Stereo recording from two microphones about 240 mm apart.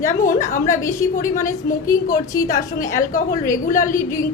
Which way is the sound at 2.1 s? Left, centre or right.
Left.